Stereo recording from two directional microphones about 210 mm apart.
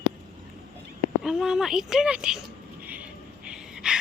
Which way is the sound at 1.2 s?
Centre (ahead or behind).